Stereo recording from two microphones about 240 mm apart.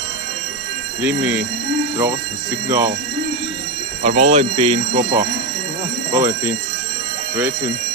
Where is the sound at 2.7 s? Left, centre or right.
Centre.